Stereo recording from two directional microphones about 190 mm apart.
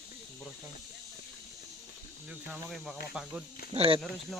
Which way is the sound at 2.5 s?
Centre (ahead or behind).